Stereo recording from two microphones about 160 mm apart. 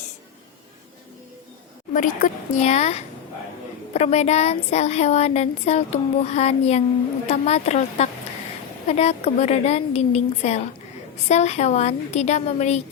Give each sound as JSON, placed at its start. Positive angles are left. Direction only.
{"t": 1.9, "sound": "speech", "side_deg": 55}